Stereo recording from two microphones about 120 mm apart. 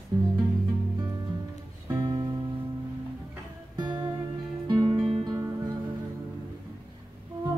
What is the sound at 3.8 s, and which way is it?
Music, 40° right (ahead or behind).